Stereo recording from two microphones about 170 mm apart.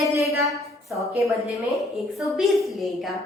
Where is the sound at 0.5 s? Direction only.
Centre (ahead or behind).